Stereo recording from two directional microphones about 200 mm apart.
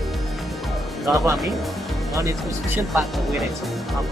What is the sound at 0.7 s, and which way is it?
Music, centre (ahead or behind).